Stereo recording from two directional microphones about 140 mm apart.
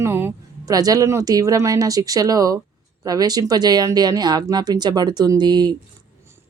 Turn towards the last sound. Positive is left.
turn(degrees=-30)  # may be behind; listen again after turning